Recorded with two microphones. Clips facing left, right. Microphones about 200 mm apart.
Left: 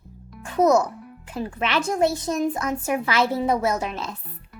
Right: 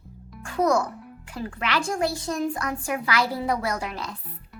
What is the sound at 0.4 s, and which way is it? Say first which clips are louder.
A child's voice: left 4 dB; 20° left (ahead or behind).